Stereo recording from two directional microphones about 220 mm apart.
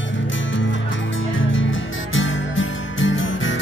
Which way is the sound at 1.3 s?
60° left (ahead or behind).